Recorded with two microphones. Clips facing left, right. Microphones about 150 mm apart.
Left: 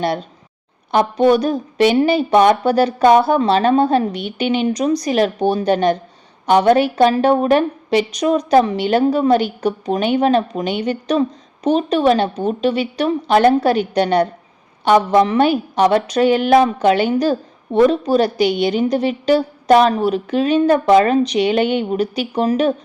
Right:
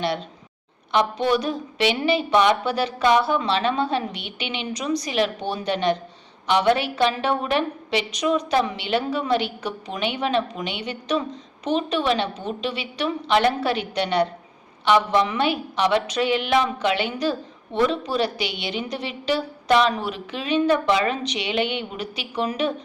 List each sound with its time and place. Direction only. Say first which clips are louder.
0.9 s a woman's voice: left 7 dB; 45° left (ahead or behind)